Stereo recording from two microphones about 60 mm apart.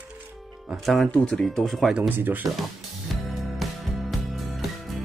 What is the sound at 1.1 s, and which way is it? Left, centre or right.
Speech, left.